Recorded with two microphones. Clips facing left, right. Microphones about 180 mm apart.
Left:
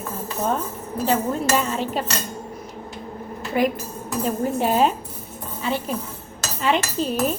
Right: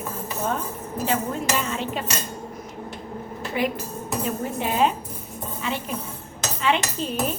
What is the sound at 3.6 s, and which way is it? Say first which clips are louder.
A woman's voice: left 4 dB; 45° left (ahead or behind).